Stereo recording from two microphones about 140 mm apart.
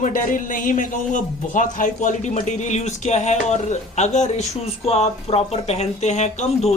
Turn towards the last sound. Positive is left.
turn(degrees=50)  # may be behind; listen again after turning